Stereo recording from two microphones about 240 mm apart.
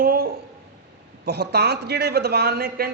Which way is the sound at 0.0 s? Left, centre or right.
Right.